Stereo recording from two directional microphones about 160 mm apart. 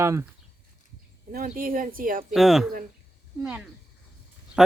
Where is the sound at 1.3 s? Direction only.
65° right (ahead or behind).